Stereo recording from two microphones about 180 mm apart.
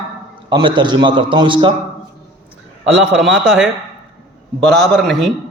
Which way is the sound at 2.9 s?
5° right (ahead or behind).